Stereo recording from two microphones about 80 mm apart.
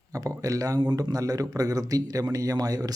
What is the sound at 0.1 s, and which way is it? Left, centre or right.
Speech, right.